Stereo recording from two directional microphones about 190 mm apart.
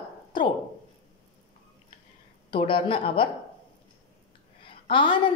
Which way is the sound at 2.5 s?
25° left (ahead or behind).